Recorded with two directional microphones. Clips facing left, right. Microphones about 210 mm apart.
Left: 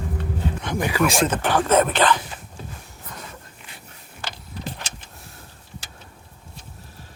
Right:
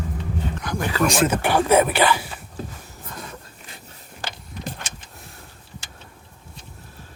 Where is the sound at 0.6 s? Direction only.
25° left (ahead or behind).